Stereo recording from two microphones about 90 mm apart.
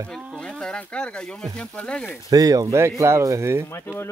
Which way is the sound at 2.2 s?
45° right (ahead or behind).